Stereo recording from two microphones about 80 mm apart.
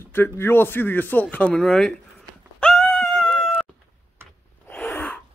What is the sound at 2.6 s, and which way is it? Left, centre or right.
Cat, centre.